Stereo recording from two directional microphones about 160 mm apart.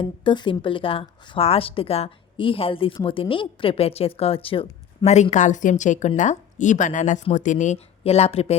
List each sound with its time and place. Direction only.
0.0 s a woman's voice: 30° left (ahead or behind)